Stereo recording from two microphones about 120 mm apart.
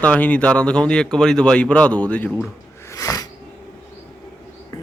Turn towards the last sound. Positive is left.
turn(degrees=30)  # may be behind; listen again after turning